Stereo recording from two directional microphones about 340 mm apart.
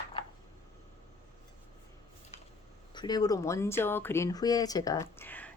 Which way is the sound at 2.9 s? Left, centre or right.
Centre.